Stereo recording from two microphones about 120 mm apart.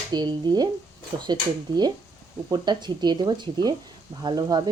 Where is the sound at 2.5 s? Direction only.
40° right (ahead or behind).